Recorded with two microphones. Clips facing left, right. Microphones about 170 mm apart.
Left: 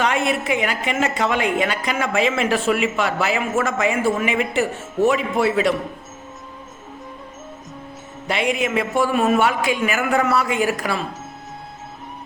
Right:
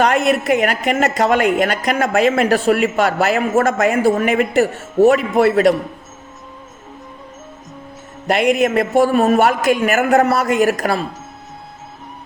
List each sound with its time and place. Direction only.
0.0 s a woman's voice: 40° right (ahead or behind)
8.5 s speech: 40° right (ahead or behind)